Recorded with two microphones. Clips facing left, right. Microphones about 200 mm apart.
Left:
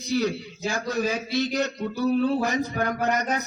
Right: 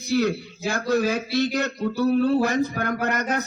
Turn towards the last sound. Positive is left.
turn(degrees=-55)  # may be behind; listen again after turning